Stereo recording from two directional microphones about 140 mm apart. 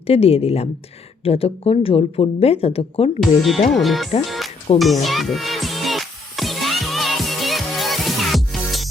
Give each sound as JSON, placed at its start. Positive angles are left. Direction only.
{"t": 0.1, "sound": "speech", "side_deg": 45}
{"t": 3.2, "sound": "speech", "side_deg": 0}
{"t": 4.3, "sound": "music", "side_deg": 0}